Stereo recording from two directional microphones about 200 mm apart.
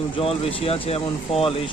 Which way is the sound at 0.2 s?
30° left (ahead or behind).